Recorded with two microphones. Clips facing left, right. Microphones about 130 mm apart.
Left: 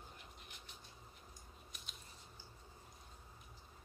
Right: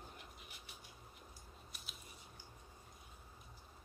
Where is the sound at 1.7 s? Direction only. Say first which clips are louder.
Even; 5° right (ahead or behind).